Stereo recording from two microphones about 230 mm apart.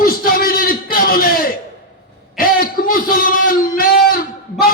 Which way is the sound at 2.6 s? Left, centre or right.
Left.